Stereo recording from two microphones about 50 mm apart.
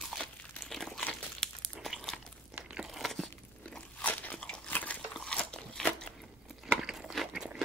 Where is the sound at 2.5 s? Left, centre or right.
Centre.